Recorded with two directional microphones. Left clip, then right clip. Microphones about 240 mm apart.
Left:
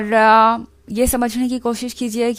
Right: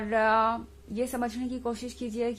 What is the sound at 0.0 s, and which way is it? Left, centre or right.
A woman's voice, left.